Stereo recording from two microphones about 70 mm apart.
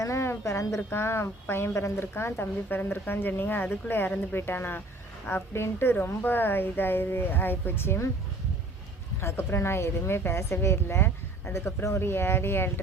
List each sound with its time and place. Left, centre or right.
0.0 s speech: left
0.8 s a woman's voice: left
9.2 s a woman's voice: left